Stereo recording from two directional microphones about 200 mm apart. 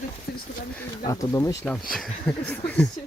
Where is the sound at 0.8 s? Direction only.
15° left (ahead or behind).